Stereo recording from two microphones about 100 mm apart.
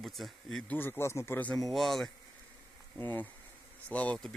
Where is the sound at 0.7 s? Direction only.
20° left (ahead or behind).